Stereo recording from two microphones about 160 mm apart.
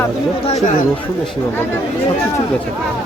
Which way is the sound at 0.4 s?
40° left (ahead or behind).